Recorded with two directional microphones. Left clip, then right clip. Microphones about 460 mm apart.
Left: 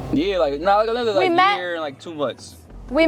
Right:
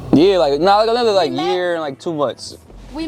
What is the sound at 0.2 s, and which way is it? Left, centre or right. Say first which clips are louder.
Speech: right 7 dB; right.